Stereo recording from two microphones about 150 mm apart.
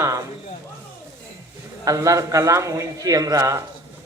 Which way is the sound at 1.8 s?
20° right (ahead or behind).